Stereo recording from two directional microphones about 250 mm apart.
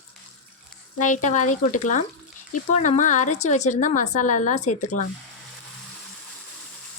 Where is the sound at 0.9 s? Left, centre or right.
Left.